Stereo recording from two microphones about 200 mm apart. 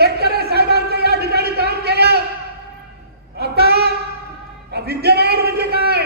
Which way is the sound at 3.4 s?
55° right (ahead or behind).